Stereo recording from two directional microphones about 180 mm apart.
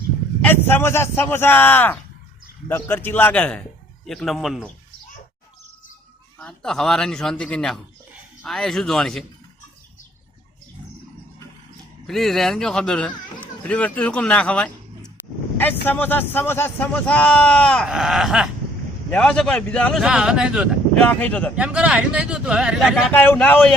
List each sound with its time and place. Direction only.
0.4 s a man's voice: 10° left (ahead or behind)
6.4 s speech: 5° left (ahead or behind)
12.0 s a man's voice: centre (ahead or behind)
21.1 s a man's voice: 5° left (ahead or behind)
21.5 s speech: 5° right (ahead or behind)
23.1 s a man's voice: 10° left (ahead or behind)